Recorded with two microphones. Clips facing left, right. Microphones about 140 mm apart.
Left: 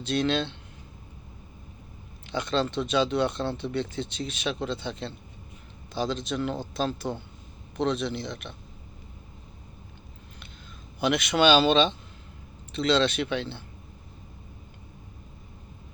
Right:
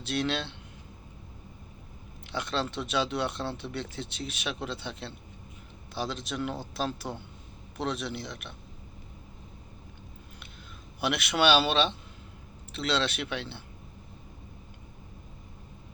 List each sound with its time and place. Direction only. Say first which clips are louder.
0.0 s speech: left 5 dB; 5° right (ahead or behind)
2.3 s speech: left 5 dB; 5° right (ahead or behind)
11.0 s speech: left 4 dB; 5° right (ahead or behind)